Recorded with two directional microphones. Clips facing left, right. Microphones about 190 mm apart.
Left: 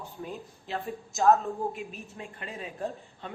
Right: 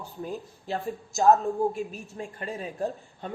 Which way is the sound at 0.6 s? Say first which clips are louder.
Right 3 dB; 40° right (ahead or behind).